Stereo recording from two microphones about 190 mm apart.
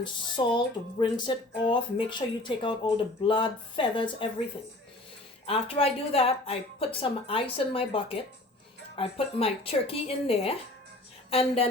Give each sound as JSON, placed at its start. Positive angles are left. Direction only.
{"t": 0.0, "sound": "speech", "side_deg": 25}
{"t": 5.5, "sound": "a woman's voice", "side_deg": 30}